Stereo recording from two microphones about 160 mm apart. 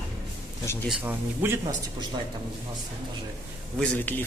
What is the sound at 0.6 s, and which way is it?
Speech, 15° left (ahead or behind).